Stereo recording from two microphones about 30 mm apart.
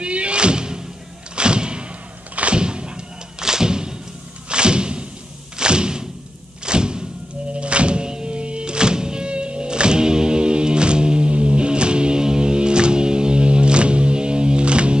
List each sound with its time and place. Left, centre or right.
0.0 s music: right
1.3 s vehicle: right
2.5 s a sound: right
3.4 s thump: right
7.5 s thunk: right